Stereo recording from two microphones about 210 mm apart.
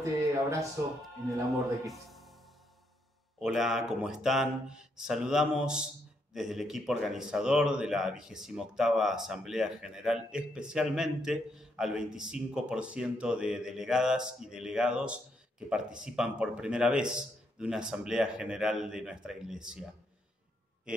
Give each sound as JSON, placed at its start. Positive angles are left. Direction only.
{"t": 0.0, "sound": "a sound", "side_deg": -15}
{"t": 1.9, "sound": "music", "side_deg": 0}
{"t": 3.3, "sound": "speech", "side_deg": 0}